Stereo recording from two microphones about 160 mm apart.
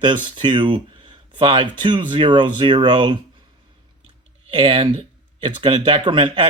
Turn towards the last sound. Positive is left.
turn(degrees=-30)  # may be behind; listen again after turning